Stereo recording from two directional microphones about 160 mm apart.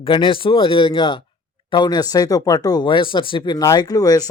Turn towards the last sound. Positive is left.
turn(degrees=25)  # may be behind; listen again after turning